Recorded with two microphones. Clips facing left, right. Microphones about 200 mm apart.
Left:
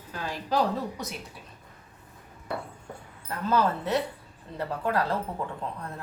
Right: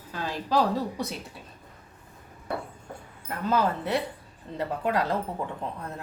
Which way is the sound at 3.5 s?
15° right (ahead or behind).